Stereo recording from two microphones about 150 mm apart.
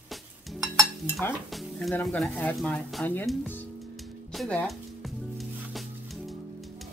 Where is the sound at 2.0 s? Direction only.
10° left (ahead or behind).